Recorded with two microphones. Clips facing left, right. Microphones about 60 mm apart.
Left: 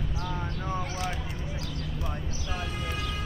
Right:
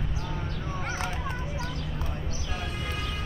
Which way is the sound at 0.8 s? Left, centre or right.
Right.